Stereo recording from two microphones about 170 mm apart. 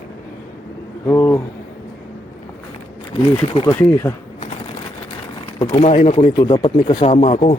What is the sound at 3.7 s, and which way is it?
Speech, 15° left (ahead or behind).